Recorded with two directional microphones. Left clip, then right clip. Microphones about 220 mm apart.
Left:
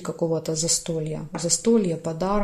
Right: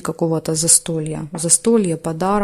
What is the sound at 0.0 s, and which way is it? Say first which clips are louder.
Speech: right 5 dB; 40° right (ahead or behind).